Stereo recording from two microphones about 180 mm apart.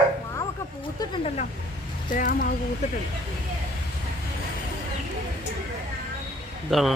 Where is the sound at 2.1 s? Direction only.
50° left (ahead or behind).